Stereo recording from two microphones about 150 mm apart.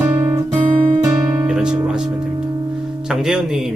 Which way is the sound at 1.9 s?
5° right (ahead or behind).